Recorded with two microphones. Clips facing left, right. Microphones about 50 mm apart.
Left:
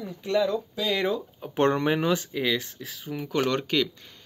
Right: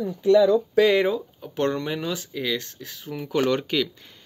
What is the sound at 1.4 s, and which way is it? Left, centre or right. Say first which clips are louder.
Speech: left 3 dB; left.